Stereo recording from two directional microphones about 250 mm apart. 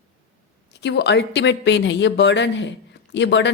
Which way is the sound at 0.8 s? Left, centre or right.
Left.